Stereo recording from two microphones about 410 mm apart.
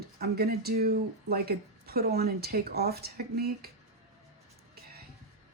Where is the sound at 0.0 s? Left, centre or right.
Right.